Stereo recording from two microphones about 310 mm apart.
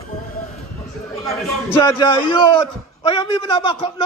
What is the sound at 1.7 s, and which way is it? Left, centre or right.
A man's voice, centre.